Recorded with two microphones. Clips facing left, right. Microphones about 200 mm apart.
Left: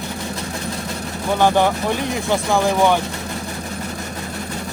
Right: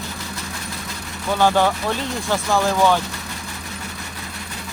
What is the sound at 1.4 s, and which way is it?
Speech, 15° left (ahead or behind).